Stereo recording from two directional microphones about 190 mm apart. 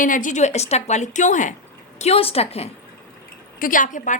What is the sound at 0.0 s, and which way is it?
A woman's voice, 45° left (ahead or behind).